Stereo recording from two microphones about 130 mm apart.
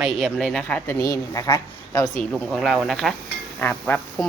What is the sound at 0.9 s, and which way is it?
Speech, 25° left (ahead or behind).